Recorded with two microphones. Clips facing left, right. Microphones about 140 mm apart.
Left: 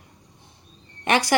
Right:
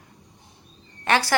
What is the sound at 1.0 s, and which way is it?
Speech, 15° left (ahead or behind).